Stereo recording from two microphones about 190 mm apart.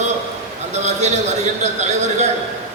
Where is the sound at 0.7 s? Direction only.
35° right (ahead or behind).